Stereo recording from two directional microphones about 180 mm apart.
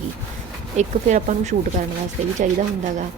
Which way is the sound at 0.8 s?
40° right (ahead or behind).